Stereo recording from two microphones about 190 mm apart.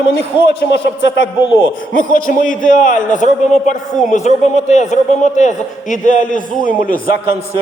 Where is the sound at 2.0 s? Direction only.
45° left (ahead or behind).